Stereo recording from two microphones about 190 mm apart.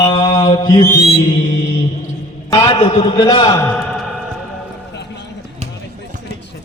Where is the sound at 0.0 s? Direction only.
25° left (ahead or behind).